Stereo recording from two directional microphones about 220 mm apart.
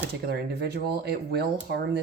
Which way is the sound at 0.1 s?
50° right (ahead or behind).